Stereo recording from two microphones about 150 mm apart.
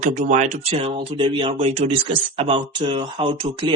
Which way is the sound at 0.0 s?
55° right (ahead or behind).